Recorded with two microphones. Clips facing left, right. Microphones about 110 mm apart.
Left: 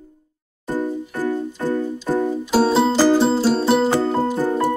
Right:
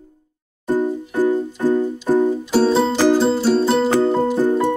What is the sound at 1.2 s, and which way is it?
Keyboard, 15° right (ahead or behind).